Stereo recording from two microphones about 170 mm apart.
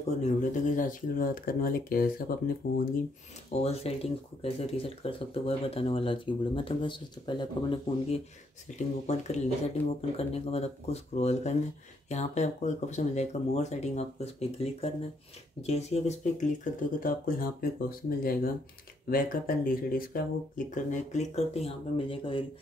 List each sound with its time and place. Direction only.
0.2 s speech: 45° left (ahead or behind)
3.6 s speech: 35° left (ahead or behind)
8.7 s speech: 40° left (ahead or behind)